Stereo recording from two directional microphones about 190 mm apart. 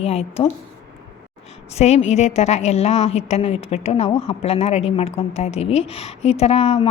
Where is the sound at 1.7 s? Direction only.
35° left (ahead or behind).